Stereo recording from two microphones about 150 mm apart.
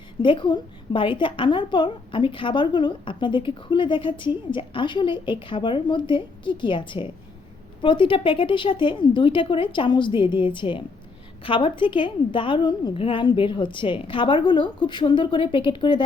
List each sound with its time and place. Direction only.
0.2 s a woman's voice: 35° left (ahead or behind)